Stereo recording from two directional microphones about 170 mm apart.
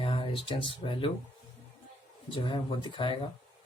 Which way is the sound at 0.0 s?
30° left (ahead or behind).